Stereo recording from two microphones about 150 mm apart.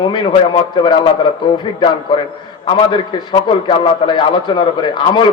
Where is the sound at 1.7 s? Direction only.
35° left (ahead or behind).